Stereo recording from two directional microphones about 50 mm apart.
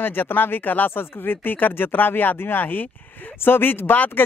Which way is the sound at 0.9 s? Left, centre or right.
Left.